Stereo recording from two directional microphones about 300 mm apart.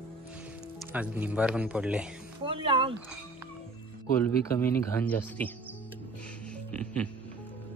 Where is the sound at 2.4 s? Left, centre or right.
Centre.